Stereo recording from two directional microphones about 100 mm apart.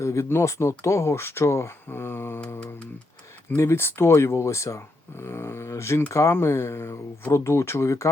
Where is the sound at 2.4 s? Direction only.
15° left (ahead or behind).